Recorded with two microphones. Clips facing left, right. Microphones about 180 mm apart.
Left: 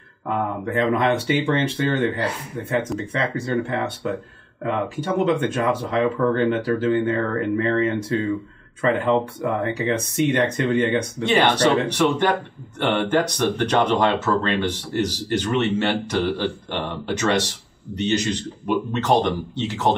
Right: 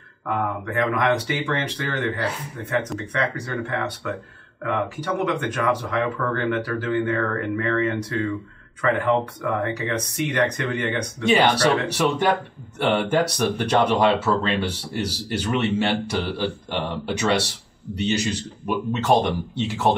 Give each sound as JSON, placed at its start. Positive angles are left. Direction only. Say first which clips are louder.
{"t": 0.3, "sound": "speech", "louder": "left 2 dB", "side_deg": 25}
{"t": 11.2, "sound": "speech", "louder": "even", "side_deg": -10}